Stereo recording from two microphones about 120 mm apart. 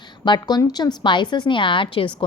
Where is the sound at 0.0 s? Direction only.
35° left (ahead or behind).